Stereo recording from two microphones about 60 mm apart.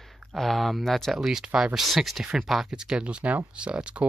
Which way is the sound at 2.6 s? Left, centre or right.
Centre.